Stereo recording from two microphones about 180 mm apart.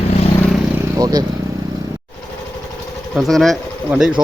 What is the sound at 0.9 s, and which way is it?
Vehicle, 20° right (ahead or behind).